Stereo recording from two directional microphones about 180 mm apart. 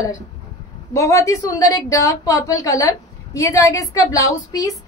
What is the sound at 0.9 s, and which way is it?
A woman's voice, 15° left (ahead or behind).